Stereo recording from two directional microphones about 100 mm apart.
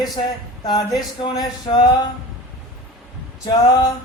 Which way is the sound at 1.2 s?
45° left (ahead or behind).